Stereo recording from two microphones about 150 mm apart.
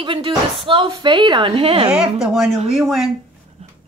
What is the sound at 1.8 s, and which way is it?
Speech, 5° right (ahead or behind).